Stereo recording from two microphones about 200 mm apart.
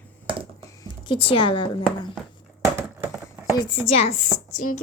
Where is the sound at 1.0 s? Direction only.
25° left (ahead or behind).